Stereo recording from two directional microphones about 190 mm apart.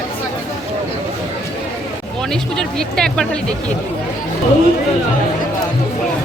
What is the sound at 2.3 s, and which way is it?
Speech, 5° left (ahead or behind).